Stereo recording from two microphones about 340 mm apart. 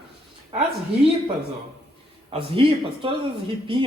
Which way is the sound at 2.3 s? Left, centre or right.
Centre.